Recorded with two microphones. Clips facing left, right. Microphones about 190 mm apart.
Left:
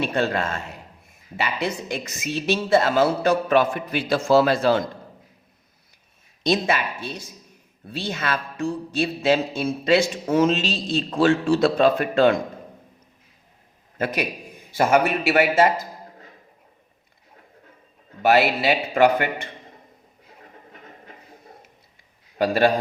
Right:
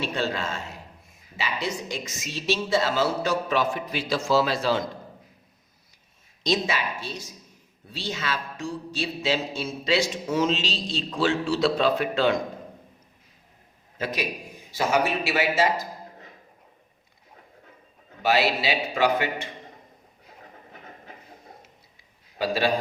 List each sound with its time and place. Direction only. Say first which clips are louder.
0.0 s a man's voice: left 5 dB; 55° left (ahead or behind)
6.4 s a man's voice: left 4 dB; 55° left (ahead or behind)
14.0 s speech: left 4 dB; 55° left (ahead or behind)
18.2 s a man's voice: left 5 dB; 55° left (ahead or behind)
22.4 s a man's voice: left 6 dB; 50° left (ahead or behind)